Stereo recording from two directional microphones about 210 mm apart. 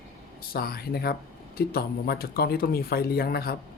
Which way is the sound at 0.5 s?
45° left (ahead or behind).